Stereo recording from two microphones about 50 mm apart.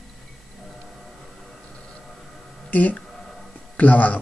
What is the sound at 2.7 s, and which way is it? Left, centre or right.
Speech, left.